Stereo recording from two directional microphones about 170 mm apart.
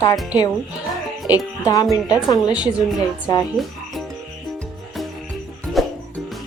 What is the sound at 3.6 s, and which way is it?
Speech, centre (ahead or behind).